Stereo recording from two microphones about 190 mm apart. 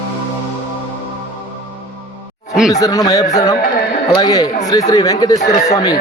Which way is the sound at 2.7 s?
20° left (ahead or behind).